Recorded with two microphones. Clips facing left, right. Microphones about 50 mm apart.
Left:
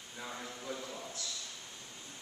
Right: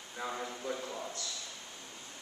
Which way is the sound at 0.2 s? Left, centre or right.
Centre.